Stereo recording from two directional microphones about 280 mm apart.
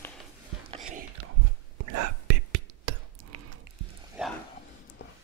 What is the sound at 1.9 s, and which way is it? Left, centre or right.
Whispering, right.